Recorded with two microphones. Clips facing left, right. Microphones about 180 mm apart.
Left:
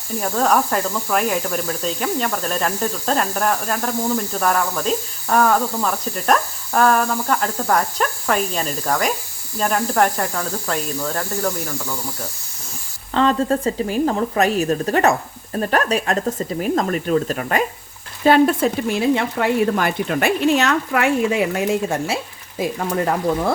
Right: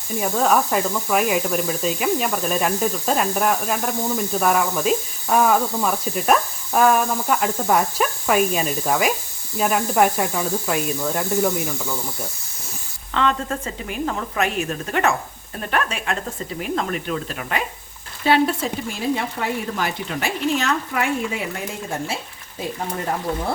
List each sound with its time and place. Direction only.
0.2 s speech: centre (ahead or behind)
13.1 s a woman's voice: 35° left (ahead or behind); by 21.6 s 80° left
22.0 s speech: 90° left